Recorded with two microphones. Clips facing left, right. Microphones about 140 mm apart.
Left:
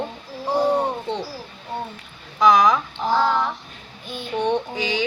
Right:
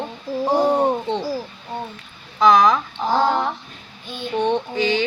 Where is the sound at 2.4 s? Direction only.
15° left (ahead or behind).